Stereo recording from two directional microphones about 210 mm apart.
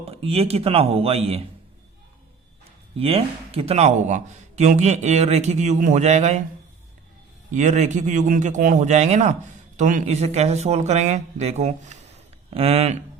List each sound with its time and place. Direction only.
0.0 s speech: 30° right (ahead or behind)
3.0 s speech: 30° right (ahead or behind)
7.5 s speech: 35° right (ahead or behind)